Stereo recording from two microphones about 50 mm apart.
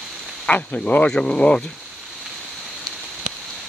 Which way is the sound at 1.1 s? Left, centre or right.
Centre.